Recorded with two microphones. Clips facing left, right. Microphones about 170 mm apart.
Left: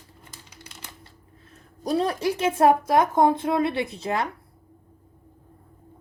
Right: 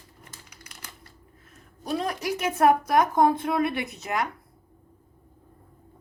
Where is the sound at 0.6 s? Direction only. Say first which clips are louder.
Left 4 dB; 25° left (ahead or behind).